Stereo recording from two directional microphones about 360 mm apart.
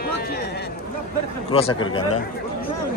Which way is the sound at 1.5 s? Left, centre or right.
Centre.